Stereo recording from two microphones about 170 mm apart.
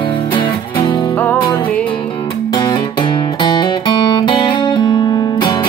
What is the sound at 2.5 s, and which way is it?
Guitar, 25° left (ahead or behind).